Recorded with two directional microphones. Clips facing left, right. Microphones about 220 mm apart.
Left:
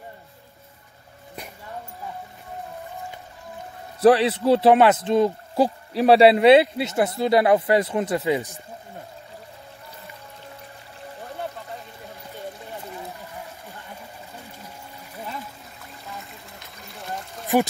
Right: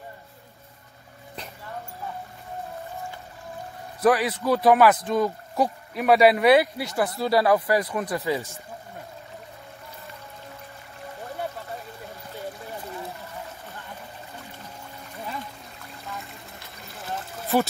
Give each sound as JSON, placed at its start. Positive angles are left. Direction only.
{"t": 4.0, "sound": "a man's voice", "side_deg": 30}
{"t": 16.1, "sound": "trickle", "side_deg": 0}
{"t": 16.8, "sound": "a sound", "side_deg": 0}